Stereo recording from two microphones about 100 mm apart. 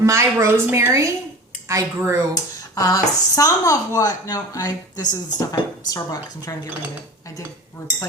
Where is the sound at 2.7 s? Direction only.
35° left (ahead or behind).